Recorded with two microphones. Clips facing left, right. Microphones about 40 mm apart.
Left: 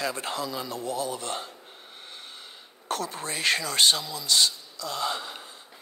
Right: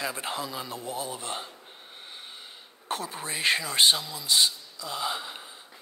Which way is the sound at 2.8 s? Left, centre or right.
Centre.